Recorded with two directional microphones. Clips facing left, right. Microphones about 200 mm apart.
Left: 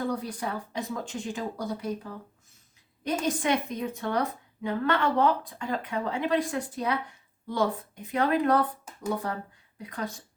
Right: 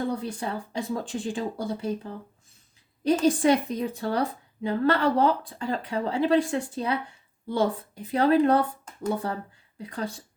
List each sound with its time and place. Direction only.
0.0 s speech: 25° right (ahead or behind)
3.2 s a woman's voice: 35° right (ahead or behind)